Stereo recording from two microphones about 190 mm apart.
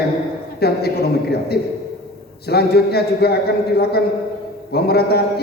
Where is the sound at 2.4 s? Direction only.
55° left (ahead or behind).